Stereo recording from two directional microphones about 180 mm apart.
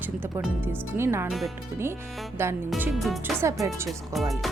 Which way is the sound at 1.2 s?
Centre (ahead or behind).